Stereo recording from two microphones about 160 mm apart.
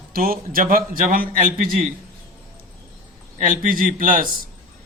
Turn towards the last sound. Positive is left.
turn(degrees=-60)  # may be behind; listen again after turning